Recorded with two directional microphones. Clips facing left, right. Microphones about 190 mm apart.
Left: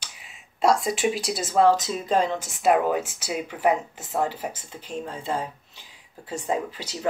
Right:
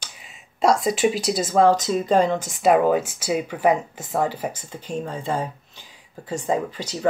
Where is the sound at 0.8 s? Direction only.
35° right (ahead or behind).